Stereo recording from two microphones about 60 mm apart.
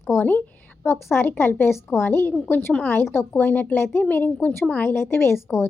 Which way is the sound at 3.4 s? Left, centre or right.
Left.